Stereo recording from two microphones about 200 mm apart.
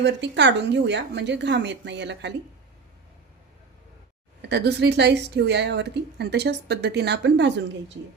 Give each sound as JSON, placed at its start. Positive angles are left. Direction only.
{"t": 0.0, "sound": "a woman's voice", "side_deg": -60}
{"t": 4.4, "sound": "a woman's voice", "side_deg": -55}